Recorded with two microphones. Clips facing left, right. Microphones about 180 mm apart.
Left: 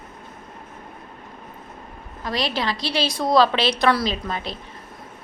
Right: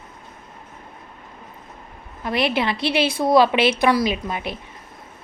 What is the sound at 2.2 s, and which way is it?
A woman's voice, 20° right (ahead or behind).